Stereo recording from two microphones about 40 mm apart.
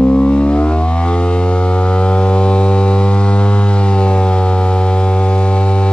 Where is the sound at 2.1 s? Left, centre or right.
Left.